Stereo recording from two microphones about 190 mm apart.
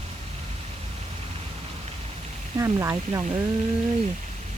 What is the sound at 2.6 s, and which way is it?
Speech, 15° right (ahead or behind).